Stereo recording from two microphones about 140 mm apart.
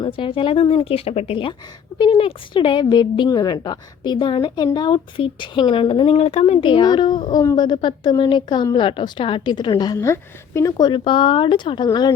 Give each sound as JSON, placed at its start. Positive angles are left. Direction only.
{"t": 0.0, "sound": "a woman's voice", "side_deg": 35}